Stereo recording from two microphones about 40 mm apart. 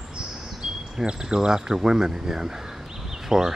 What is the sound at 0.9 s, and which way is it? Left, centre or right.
Speech, centre.